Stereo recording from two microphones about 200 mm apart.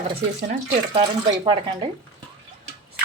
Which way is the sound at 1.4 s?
25° right (ahead or behind).